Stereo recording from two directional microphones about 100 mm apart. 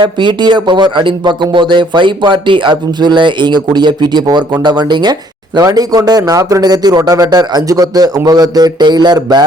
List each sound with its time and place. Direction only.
0.0 s a man's voice: 50° right (ahead or behind)